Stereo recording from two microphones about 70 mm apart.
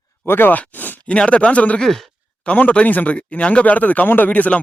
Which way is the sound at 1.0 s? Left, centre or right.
Centre.